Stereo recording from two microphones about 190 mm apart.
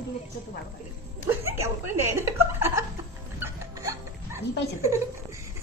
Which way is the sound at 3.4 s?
15° right (ahead or behind).